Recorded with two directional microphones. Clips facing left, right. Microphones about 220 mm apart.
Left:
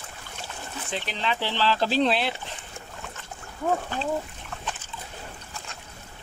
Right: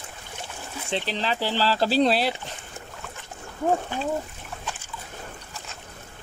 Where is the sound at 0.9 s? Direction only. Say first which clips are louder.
Right 3 dB; 35° right (ahead or behind).